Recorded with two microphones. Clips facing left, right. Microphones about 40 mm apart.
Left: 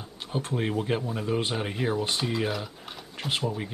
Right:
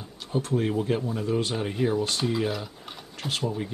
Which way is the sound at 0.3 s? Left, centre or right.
Left.